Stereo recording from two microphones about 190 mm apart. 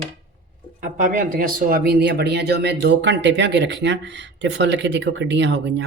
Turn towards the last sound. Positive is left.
turn(degrees=-65)  # may be behind; listen again after turning